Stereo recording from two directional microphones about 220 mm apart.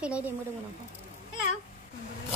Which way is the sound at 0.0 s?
5° right (ahead or behind).